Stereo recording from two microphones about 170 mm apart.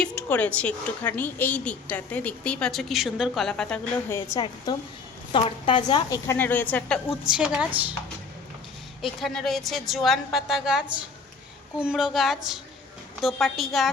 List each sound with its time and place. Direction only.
0.0 s a woman's voice: 10° left (ahead or behind)
4.1 s a woman's voice: 25° left (ahead or behind); by 7.8 s 5° right (ahead or behind)
9.2 s a woman's voice: centre (ahead or behind)